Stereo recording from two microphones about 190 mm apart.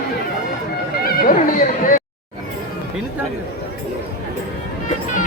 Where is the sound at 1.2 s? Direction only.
50° left (ahead or behind).